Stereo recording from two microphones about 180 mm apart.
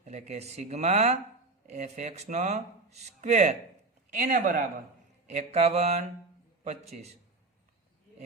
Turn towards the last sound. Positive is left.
turn(degrees=-35)  # may be behind; listen again after turning